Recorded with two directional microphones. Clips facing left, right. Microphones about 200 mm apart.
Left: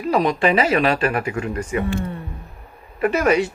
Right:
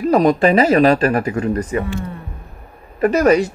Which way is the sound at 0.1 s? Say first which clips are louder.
Right 4 dB; 45° right (ahead or behind).